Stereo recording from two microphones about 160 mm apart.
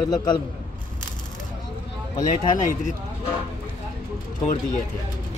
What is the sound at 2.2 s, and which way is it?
Speech, 55° left (ahead or behind).